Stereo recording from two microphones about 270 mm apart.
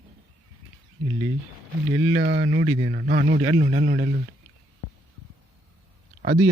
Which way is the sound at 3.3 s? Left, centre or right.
Right.